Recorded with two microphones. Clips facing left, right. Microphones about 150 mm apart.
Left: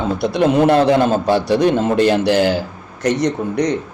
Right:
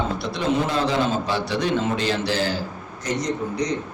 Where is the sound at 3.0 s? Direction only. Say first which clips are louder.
Left 8 dB; 70° left (ahead or behind).